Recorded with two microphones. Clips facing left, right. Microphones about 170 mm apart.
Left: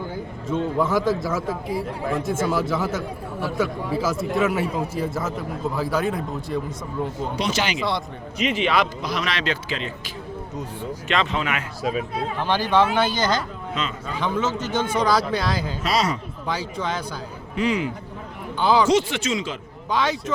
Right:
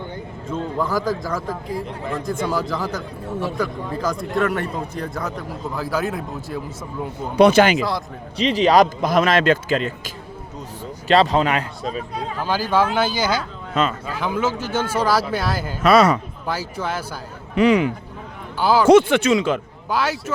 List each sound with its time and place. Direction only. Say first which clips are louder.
0.4 s a man's voice: left 2 dB; centre (ahead or behind)
7.3 s speech: right 14 dB; 55° right (ahead or behind)
7.8 s a man's voice: right 2 dB; centre (ahead or behind)
8.4 s a man's voice: right 6 dB; 35° right (ahead or behind)
11.1 s speech: right 8 dB; 35° right (ahead or behind)
11.8 s a man's voice: left 2 dB; 5° left (ahead or behind)
15.8 s speech: right 11 dB; 55° right (ahead or behind)
16.5 s a man's voice: right 1 dB; 5° right (ahead or behind)
17.5 s speech: right 7 dB; 65° right (ahead or behind)
18.6 s a man's voice: right 1 dB; 5° right (ahead or behind)
18.9 s speech: right 8 dB; 55° right (ahead or behind)
19.9 s a man's voice: right 1 dB; 5° right (ahead or behind)